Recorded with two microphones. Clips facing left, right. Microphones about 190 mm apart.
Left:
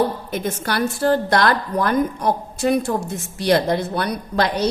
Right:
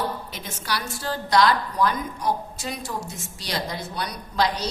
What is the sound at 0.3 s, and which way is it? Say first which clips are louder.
A woman's voice: left 8 dB; 55° left (ahead or behind).